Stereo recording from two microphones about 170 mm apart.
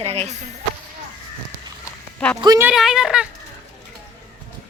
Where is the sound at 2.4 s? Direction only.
20° right (ahead or behind).